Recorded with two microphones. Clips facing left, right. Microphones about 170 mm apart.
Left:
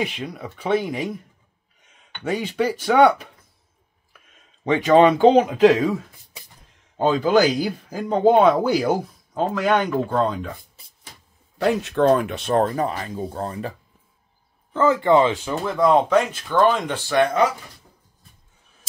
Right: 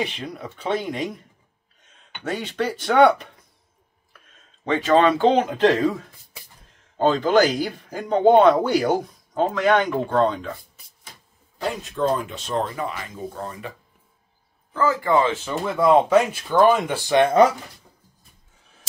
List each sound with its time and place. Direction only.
0.0 s speech: centre (ahead or behind)
2.2 s speech: 10° left (ahead or behind)
4.6 s speech: 15° left (ahead or behind)
11.6 s speech: 75° left (ahead or behind); by 13.7 s 35° left (ahead or behind)
14.7 s speech: 25° left (ahead or behind)
15.6 s speech: 5° right (ahead or behind)
17.1 s speech: 25° right (ahead or behind)